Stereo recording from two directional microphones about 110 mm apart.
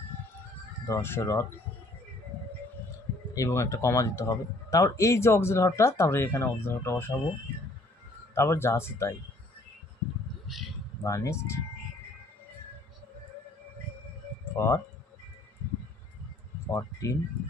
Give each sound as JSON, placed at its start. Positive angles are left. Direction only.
{"t": 0.8, "sound": "speech", "side_deg": 25}
{"t": 3.3, "sound": "speech", "side_deg": 30}
{"t": 8.4, "sound": "speech", "side_deg": 25}
{"t": 10.4, "sound": "a sound", "side_deg": 0}
{"t": 11.0, "sound": "speech", "side_deg": 25}
{"t": 14.5, "sound": "speech", "side_deg": 25}
{"t": 16.6, "sound": "speech", "side_deg": 30}